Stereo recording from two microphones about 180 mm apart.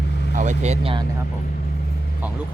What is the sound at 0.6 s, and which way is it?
Speech, 35° right (ahead or behind).